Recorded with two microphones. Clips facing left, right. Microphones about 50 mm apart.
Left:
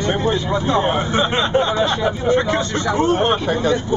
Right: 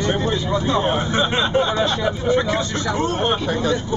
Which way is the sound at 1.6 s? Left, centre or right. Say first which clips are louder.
Left 2 dB; centre.